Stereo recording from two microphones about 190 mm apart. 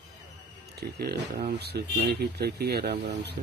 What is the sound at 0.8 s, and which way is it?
Speech, 55° right (ahead or behind).